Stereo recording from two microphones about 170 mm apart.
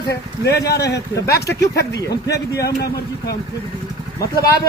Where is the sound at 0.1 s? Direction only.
75° left (ahead or behind).